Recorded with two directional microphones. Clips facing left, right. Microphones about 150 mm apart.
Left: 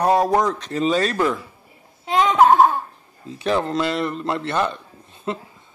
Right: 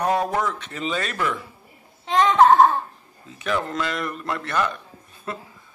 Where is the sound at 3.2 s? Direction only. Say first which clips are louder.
Left 5 dB; 30° left (ahead or behind).